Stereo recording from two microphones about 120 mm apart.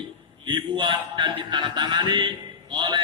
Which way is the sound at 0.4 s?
40° right (ahead or behind).